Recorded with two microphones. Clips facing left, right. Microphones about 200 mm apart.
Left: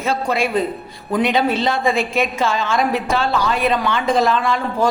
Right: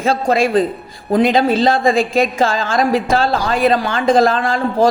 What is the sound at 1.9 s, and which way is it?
Speech, 35° right (ahead or behind).